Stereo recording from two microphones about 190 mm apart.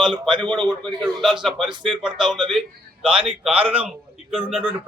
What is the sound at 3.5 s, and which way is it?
Speech, 30° right (ahead or behind).